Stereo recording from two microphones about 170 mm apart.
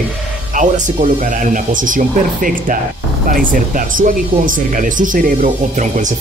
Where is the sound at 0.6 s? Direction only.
50° right (ahead or behind).